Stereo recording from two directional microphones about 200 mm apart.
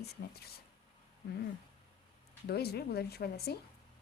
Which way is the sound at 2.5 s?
55° left (ahead or behind).